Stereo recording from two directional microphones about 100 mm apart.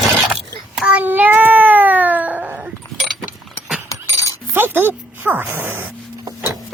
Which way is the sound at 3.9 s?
35° left (ahead or behind).